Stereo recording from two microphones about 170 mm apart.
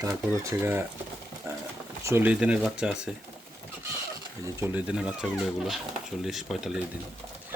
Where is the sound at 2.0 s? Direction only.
10° right (ahead or behind).